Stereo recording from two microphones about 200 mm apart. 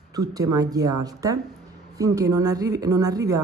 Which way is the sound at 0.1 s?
20° right (ahead or behind).